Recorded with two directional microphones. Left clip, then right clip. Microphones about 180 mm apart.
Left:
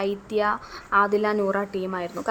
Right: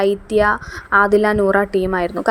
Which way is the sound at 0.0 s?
30° right (ahead or behind).